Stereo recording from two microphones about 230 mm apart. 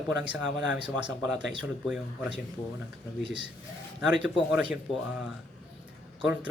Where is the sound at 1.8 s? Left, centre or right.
Centre.